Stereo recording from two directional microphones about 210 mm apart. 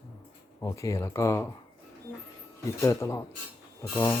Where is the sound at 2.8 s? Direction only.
15° left (ahead or behind).